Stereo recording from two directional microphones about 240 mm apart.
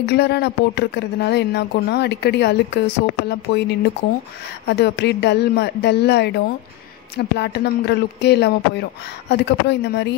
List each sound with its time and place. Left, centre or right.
0.0 s speech: left